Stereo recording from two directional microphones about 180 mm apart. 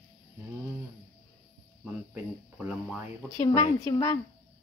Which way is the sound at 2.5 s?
Centre (ahead or behind).